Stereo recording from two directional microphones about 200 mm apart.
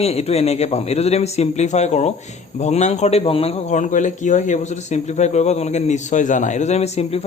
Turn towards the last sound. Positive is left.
turn(degrees=30)  # may be behind; listen again after turning